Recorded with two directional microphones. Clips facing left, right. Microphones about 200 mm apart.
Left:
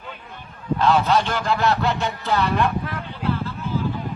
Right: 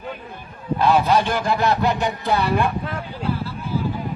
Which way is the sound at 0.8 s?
15° right (ahead or behind).